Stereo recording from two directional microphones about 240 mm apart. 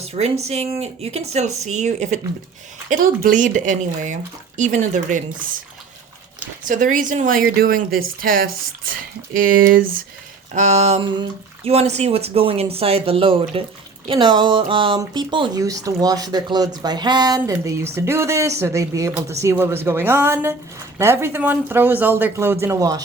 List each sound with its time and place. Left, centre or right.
0.0 s a sound: right
0.4 s speech: right
6.7 s speech: right; by 23.0 s centre